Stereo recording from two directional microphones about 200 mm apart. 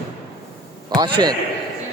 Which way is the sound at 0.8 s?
25° right (ahead or behind).